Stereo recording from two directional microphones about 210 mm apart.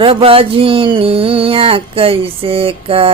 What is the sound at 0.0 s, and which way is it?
Mantra, 25° right (ahead or behind).